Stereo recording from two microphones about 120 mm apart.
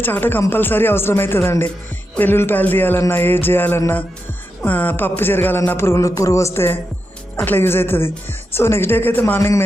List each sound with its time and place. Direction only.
0.0 s speech: 15° left (ahead or behind)